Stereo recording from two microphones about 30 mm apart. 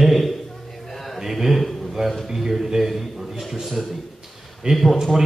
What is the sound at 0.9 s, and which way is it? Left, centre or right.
Mantra, centre.